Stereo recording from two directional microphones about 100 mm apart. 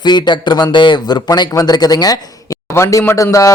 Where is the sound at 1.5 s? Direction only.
40° left (ahead or behind).